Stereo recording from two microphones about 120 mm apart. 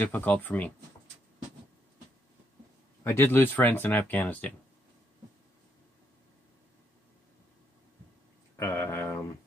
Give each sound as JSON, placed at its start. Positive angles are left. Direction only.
{"t": 0.0, "sound": "speech", "side_deg": 15}
{"t": 3.0, "sound": "speech", "side_deg": 20}
{"t": 8.5, "sound": "a sound", "side_deg": 25}